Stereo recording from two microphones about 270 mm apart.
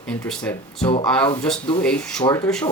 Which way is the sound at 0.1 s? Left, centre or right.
Centre.